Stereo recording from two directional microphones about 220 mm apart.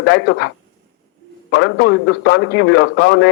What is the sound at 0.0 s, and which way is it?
A man's voice, 50° left (ahead or behind).